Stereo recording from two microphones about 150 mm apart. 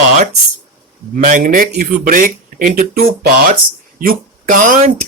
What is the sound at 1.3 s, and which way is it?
Speech, 65° right (ahead or behind).